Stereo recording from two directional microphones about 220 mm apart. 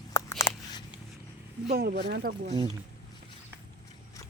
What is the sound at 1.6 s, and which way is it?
Speech, 45° right (ahead or behind).